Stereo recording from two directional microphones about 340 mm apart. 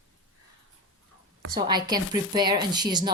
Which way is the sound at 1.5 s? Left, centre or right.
Centre.